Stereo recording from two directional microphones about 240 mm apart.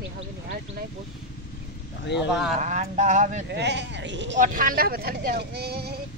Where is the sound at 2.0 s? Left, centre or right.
Left.